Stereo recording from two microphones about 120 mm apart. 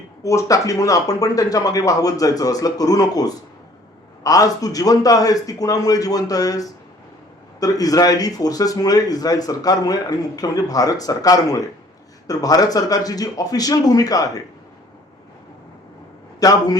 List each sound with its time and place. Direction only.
0.2 s speech: 25° left (ahead or behind)
16.4 s speech: 30° left (ahead or behind)